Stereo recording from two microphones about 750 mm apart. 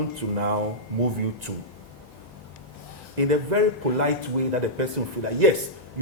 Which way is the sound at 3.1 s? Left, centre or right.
Right.